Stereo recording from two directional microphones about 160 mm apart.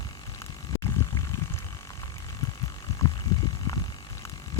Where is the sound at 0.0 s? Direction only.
25° left (ahead or behind).